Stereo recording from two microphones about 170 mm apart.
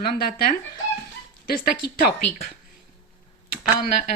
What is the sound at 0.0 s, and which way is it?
A woman's voice, 60° left (ahead or behind).